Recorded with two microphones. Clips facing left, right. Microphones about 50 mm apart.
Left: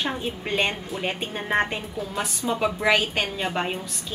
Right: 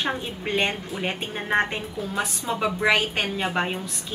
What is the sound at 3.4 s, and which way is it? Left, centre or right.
Speech, centre.